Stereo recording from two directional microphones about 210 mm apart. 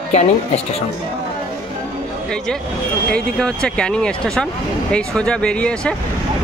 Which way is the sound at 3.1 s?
5° left (ahead or behind).